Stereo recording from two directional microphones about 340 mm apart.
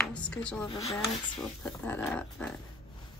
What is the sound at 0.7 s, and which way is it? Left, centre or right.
Speech, centre.